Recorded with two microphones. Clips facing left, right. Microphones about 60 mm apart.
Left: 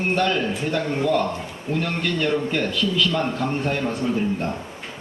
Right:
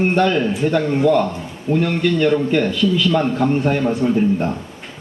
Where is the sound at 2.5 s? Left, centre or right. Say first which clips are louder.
Right 6 dB; centre.